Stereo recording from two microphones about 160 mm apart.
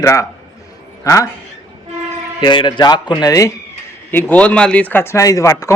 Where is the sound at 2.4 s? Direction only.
30° left (ahead or behind).